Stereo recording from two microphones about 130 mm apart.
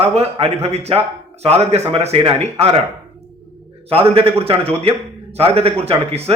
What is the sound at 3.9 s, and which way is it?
A man's voice, 45° right (ahead or behind).